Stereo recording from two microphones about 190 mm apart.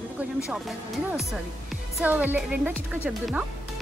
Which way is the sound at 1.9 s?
10° right (ahead or behind).